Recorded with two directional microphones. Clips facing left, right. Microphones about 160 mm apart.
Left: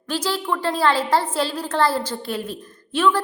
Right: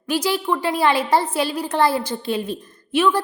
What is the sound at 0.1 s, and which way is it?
A woman's voice, 15° right (ahead or behind).